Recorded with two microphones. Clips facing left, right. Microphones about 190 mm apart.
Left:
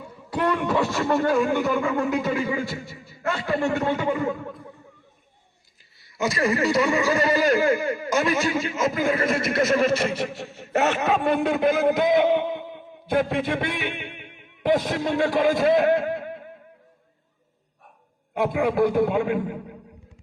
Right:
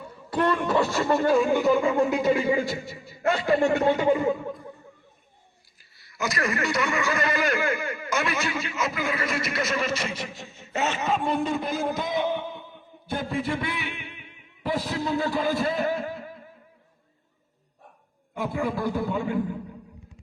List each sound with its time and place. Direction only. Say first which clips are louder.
0.0 s a sound: even; 10° left (ahead or behind)
0.7 s speech: even; centre (ahead or behind)
1.8 s a man's voice: right 1 dB; 25° right (ahead or behind)
6.1 s a man's voice: left 5 dB; 30° left (ahead or behind); by 16.4 s 70° left (ahead or behind)
18.3 s a man's voice: left 7 dB; 80° left